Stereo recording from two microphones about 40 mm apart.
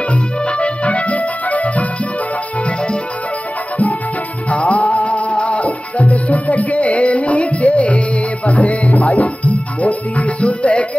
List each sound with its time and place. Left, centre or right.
0.5 s music: left
4.5 s music: left